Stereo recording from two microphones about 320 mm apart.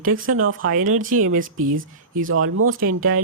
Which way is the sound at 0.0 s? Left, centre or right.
Right.